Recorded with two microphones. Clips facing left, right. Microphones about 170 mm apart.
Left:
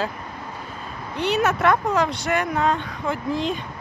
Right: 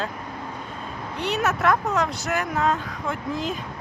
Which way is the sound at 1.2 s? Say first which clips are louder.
Left 4 dB; centre (ahead or behind).